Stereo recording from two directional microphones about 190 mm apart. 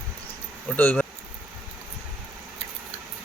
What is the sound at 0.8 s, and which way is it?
Speech, 10° left (ahead or behind).